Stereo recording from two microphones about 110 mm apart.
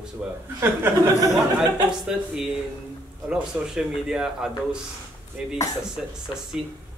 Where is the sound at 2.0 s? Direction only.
5° right (ahead or behind).